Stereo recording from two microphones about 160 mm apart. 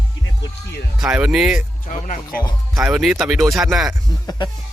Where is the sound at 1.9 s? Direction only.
55° left (ahead or behind).